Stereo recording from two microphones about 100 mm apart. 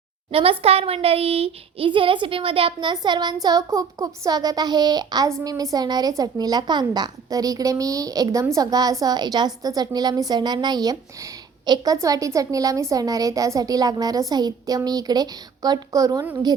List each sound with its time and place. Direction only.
0.3 s speech: 70° right (ahead or behind)
2.9 s child singing: 45° right (ahead or behind)
3.4 s a woman's voice: 40° right (ahead or behind)
12.0 s a woman's voice: 35° right (ahead or behind)